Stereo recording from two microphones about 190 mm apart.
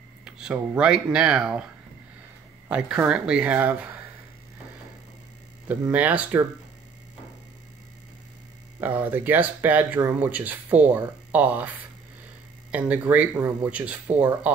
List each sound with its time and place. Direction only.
0.2 s speech: 5° right (ahead or behind)
2.7 s speech: 5° right (ahead or behind)
5.7 s speech: 10° right (ahead or behind)
8.8 s speech: 10° right (ahead or behind)
12.7 s speech: 10° right (ahead or behind)